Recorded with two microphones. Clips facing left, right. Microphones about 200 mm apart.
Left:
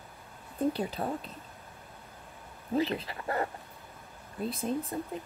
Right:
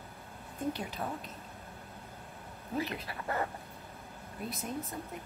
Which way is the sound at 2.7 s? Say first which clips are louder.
Left 6 dB; 25° left (ahead or behind).